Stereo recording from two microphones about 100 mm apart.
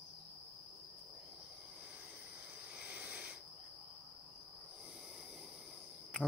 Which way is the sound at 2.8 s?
10° right (ahead or behind).